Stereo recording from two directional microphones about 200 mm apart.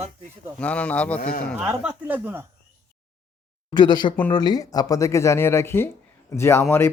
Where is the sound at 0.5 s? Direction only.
5° left (ahead or behind).